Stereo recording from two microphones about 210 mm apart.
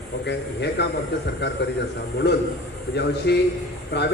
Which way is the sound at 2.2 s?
55° left (ahead or behind).